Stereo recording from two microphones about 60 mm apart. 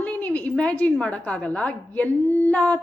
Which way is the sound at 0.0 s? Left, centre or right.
Left.